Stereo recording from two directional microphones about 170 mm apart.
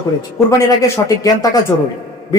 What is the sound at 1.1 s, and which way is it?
Speech, 20° left (ahead or behind).